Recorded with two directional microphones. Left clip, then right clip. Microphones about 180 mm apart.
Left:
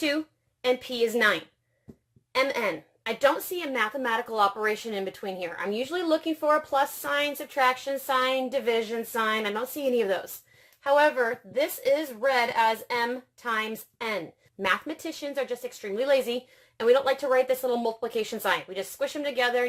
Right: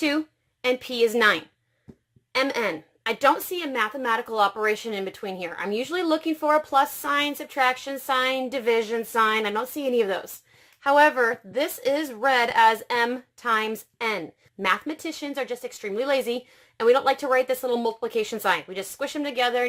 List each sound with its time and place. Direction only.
0.6 s speech: 35° right (ahead or behind)
10.8 s speech: 45° right (ahead or behind); by 19.6 s 30° right (ahead or behind)